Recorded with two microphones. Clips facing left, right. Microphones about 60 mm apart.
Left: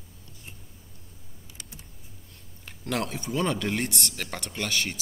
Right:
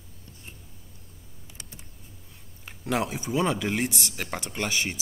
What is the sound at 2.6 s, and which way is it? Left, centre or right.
Speech, centre.